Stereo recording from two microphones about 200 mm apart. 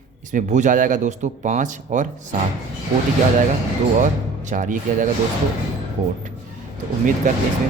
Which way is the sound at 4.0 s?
40° right (ahead or behind).